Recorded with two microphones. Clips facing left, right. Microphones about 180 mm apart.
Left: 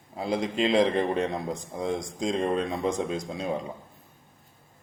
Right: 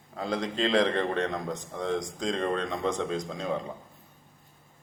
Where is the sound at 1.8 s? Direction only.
10° left (ahead or behind).